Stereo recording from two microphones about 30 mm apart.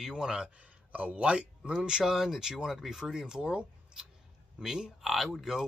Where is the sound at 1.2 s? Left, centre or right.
Right.